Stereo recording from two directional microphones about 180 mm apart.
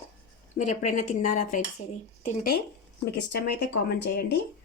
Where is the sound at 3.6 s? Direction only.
65° left (ahead or behind).